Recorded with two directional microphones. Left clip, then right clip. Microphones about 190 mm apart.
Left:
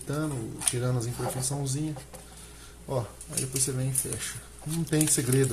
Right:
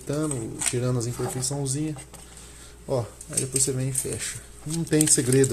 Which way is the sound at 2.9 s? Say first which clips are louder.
Right 5 dB; 20° right (ahead or behind).